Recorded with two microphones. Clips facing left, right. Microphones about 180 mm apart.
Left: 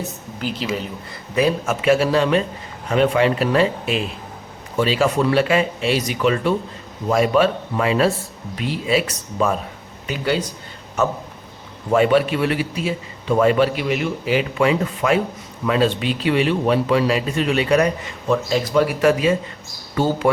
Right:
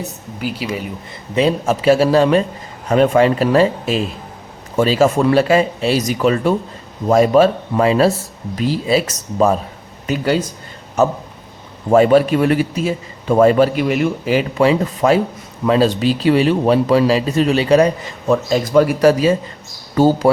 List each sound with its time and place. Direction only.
0.3 s speech: 10° right (ahead or behind)
1.4 s a man's voice: 30° right (ahead or behind)
11.9 s a man's voice: 40° right (ahead or behind)
18.3 s a man's voice: 45° right (ahead or behind)